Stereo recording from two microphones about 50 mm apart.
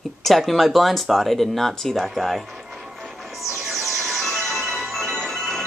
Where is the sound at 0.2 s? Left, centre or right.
Centre.